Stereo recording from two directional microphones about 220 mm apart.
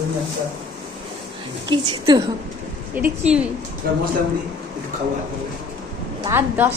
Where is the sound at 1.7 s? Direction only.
20° right (ahead or behind).